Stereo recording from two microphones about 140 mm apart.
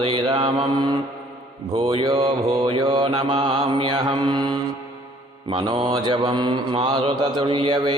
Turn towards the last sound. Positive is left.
turn(degrees=-35)  # may be behind; listen again after turning